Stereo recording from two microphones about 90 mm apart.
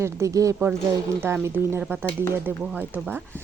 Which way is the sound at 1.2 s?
25° right (ahead or behind).